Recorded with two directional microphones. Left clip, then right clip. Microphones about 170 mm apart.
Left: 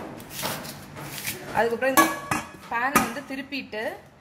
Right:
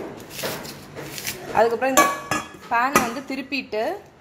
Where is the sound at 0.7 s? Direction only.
Centre (ahead or behind).